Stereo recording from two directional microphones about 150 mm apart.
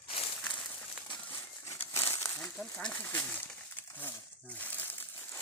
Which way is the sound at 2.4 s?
5° left (ahead or behind).